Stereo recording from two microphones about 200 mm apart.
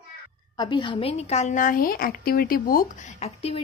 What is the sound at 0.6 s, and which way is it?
A woman's voice, 25° left (ahead or behind).